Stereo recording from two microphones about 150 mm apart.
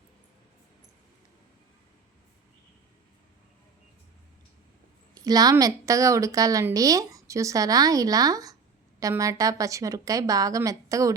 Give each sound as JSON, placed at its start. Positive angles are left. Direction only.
{"t": 5.1, "sound": "a woman's voice", "side_deg": -25}